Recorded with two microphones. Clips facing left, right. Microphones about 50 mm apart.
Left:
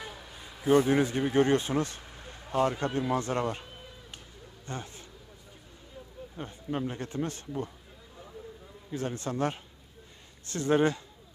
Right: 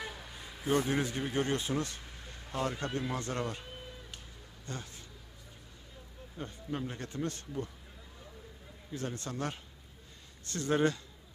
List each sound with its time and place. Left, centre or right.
0.0 s a sound: centre
0.7 s speech: left
1.3 s speech: left
2.1 s a sound: centre
3.1 s speech: left
4.6 s a man's voice: left
6.3 s speech: left
8.9 s speech: left